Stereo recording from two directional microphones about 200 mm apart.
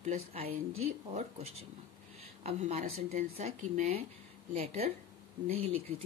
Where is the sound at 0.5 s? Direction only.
90° right.